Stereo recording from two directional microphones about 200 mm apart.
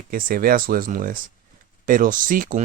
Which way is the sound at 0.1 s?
45° right (ahead or behind).